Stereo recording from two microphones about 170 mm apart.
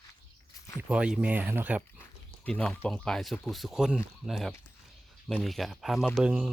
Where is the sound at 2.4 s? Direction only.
5° left (ahead or behind).